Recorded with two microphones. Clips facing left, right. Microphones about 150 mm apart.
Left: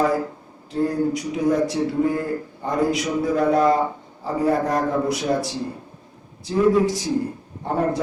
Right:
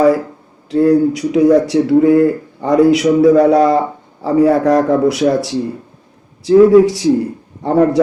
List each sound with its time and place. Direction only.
0.7 s a man's voice: 80° right